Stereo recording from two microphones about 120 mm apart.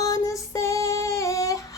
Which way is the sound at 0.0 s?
25° left (ahead or behind).